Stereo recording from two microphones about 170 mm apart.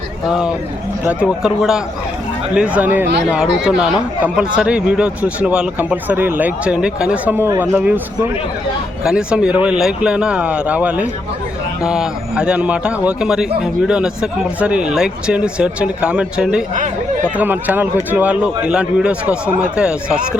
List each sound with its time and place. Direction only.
0.3 s a man's voice: 5° right (ahead or behind)
16.7 s speech: 50° right (ahead or behind)
17.3 s speech: 10° right (ahead or behind)